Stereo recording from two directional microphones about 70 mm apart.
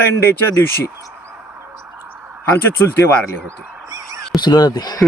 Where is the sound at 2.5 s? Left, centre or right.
Left.